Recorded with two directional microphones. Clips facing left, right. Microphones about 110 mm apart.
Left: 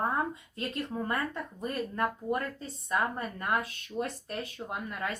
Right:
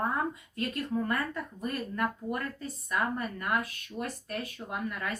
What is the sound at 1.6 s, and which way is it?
A woman's voice, 25° left (ahead or behind).